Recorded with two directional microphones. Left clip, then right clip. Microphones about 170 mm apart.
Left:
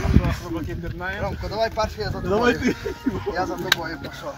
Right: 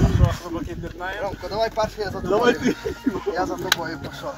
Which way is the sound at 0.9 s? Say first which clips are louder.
Even; 15° left (ahead or behind).